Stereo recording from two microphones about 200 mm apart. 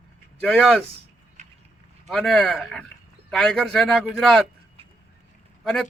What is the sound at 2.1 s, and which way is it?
Speech, centre (ahead or behind).